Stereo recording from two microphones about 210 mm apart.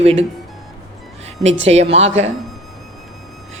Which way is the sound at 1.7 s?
30° right (ahead or behind).